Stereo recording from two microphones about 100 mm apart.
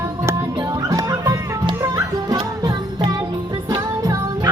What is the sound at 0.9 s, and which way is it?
Music, 35° right (ahead or behind).